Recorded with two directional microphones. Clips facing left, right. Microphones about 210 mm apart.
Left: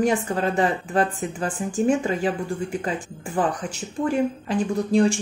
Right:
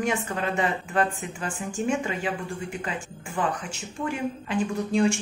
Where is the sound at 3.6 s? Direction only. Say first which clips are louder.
Left 6 dB; 40° left (ahead or behind).